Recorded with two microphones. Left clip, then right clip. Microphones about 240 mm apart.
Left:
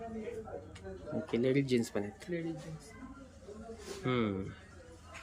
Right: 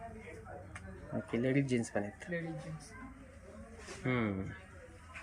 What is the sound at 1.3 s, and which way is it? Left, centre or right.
Speech, centre.